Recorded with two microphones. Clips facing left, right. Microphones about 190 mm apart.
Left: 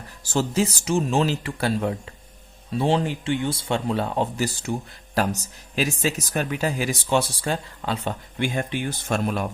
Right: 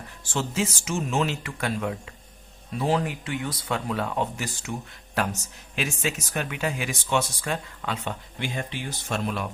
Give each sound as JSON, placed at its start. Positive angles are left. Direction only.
{"t": 0.3, "sound": "speech", "side_deg": 35}
{"t": 8.4, "sound": "speech", "side_deg": 55}